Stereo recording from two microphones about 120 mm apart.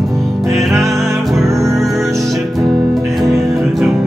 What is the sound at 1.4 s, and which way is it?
Music, 25° right (ahead or behind).